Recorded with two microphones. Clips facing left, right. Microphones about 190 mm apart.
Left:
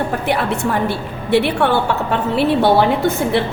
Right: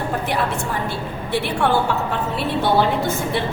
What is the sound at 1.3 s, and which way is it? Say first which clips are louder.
Speech: left 5 dB; 70° left (ahead or behind).